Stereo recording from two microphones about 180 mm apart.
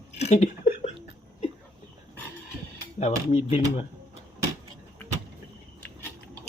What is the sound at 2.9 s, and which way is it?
Speech, 35° left (ahead or behind).